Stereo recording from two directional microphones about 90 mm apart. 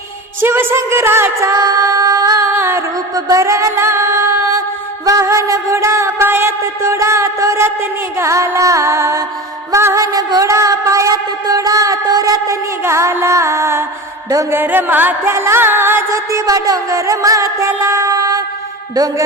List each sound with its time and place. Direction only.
0.4 s music: 25° right (ahead or behind); by 2.5 s 40° right (ahead or behind)
2.5 s music: 30° right (ahead or behind)
3.2 s music: 40° right (ahead or behind)
12.8 s music: 30° right (ahead or behind)